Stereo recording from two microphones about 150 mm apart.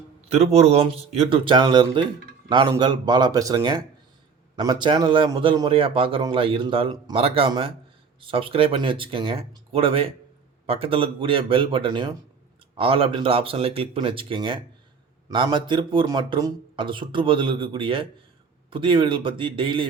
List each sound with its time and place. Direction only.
0.3 s a man's voice: 45° right (ahead or behind)